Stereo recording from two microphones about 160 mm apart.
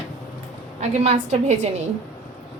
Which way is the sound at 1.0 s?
45° right (ahead or behind).